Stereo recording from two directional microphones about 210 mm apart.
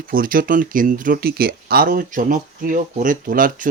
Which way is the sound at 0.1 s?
40° right (ahead or behind).